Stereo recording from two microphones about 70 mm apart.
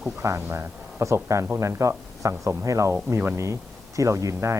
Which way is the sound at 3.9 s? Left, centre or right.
Right.